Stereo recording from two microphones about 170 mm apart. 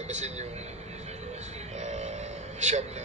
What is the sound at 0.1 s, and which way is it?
Speech, 40° right (ahead or behind).